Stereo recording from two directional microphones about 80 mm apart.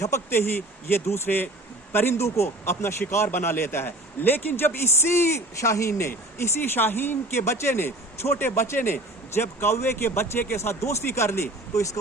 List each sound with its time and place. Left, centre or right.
0.0 s a man's voice: left